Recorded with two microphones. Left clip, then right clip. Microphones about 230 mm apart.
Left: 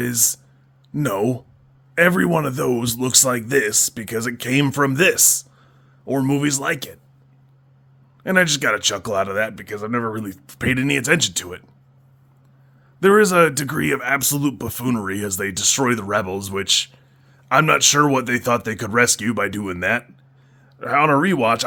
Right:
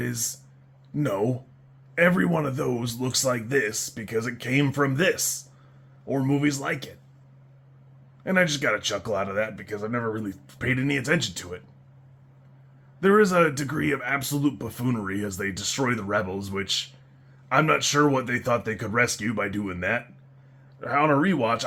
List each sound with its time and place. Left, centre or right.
0.0 s speech: left
8.2 s speech: left
13.0 s speech: left